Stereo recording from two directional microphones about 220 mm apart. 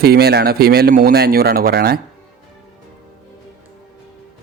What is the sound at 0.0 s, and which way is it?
A man's voice, 45° right (ahead or behind).